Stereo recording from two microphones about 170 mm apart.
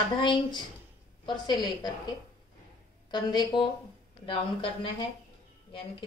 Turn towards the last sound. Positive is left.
turn(degrees=30)  # may be behind; listen again after turning